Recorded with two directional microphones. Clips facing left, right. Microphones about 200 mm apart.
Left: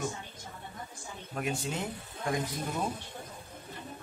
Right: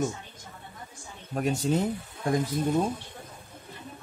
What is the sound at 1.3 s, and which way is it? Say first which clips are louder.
Speech: right 8 dB; 40° right (ahead or behind).